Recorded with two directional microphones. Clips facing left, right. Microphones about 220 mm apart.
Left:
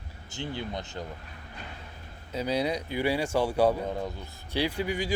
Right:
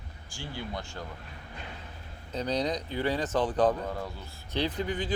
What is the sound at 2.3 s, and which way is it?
Speech, 10° left (ahead or behind).